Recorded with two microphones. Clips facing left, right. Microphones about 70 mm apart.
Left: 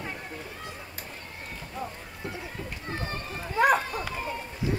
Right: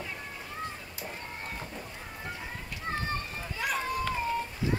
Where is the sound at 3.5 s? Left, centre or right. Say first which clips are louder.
Left 9 dB; left.